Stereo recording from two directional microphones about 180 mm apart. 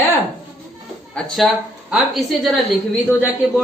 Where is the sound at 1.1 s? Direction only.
5° left (ahead or behind).